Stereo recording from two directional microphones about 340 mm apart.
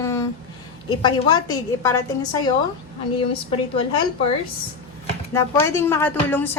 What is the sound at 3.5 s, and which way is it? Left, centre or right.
Speech, centre.